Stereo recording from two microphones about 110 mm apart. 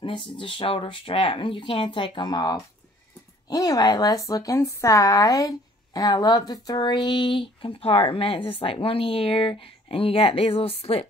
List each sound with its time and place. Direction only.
0.0 s a woman's voice: 50° left (ahead or behind); by 11.1 s 65° left (ahead or behind)